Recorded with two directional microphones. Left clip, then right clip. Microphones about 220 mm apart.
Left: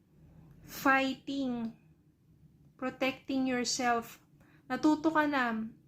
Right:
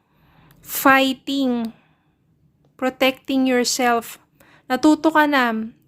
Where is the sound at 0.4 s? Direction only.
45° right (ahead or behind).